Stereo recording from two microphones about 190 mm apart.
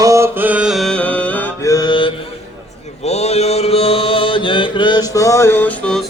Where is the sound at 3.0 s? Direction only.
35° left (ahead or behind).